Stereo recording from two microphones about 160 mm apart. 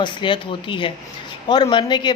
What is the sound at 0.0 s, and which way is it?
A woman's voice, 30° left (ahead or behind).